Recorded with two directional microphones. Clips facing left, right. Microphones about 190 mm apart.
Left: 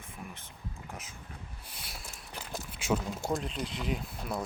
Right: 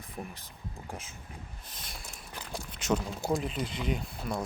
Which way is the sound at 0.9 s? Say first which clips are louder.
Right 4 dB; 30° right (ahead or behind).